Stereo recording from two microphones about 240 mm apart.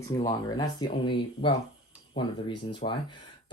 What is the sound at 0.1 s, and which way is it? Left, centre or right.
Speech, centre.